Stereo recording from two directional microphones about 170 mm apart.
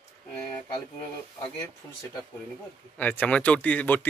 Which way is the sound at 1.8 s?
15° left (ahead or behind).